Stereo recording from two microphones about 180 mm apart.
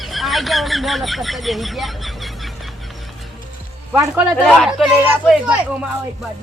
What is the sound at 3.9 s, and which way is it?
Speech, 15° right (ahead or behind).